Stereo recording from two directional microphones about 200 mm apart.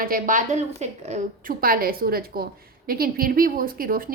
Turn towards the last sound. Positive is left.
turn(degrees=-45)  # may be behind; listen again after turning